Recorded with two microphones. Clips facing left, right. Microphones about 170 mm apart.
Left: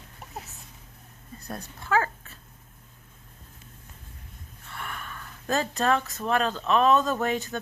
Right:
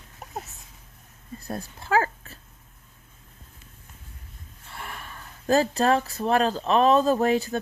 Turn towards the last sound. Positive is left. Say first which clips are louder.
# right 6 dB
turn(degrees=-35)  # may be behind; listen again after turning